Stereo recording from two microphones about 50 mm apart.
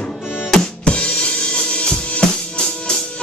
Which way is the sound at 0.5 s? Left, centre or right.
Centre.